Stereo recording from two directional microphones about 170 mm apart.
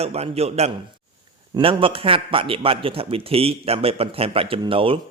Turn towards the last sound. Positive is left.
turn(degrees=-30)  # may be behind; listen again after turning